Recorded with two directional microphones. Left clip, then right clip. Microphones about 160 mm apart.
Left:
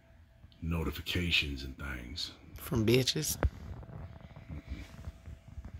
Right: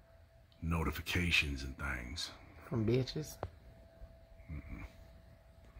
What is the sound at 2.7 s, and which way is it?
Speech, 10° left (ahead or behind).